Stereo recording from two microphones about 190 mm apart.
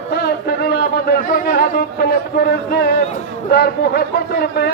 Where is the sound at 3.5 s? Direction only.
55° left (ahead or behind).